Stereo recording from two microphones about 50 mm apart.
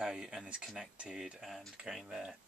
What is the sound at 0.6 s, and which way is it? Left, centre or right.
Stir, centre.